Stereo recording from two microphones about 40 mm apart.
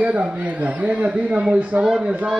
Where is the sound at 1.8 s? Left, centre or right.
Centre.